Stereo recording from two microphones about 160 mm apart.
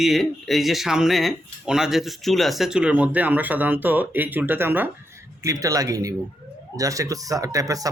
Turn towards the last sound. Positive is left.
turn(degrees=-20)  # may be behind; listen again after turning